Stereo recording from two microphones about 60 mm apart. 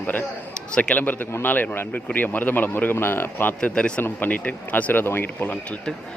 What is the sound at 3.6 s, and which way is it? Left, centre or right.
Speech, centre.